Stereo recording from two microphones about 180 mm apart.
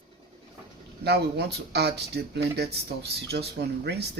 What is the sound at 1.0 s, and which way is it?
Speech, 65° right (ahead or behind).